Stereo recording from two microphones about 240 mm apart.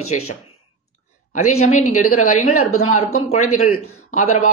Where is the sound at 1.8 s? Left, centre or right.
Left.